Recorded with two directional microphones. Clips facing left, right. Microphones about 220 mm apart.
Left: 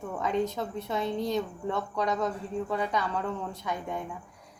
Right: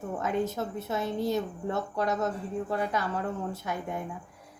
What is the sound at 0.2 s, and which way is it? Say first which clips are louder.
A woman's voice: left 1 dB; 5° right (ahead or behind).